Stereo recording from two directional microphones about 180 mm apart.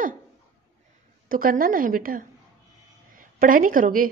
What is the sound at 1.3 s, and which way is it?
A woman's voice, 50° right (ahead or behind).